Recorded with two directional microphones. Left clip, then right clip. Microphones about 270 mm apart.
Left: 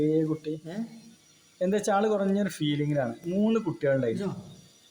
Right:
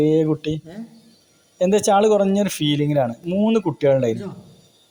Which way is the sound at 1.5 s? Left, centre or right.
Right.